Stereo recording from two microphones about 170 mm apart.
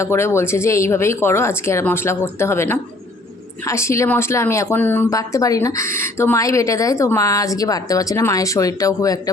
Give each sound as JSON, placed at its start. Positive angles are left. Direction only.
{"t": 0.0, "sound": "a woman's voice", "side_deg": 15}